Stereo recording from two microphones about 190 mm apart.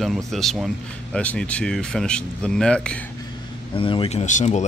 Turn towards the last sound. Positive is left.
turn(degrees=40)  # may be behind; listen again after turning